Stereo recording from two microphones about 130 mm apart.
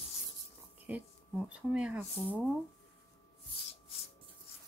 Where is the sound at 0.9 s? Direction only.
10° right (ahead or behind).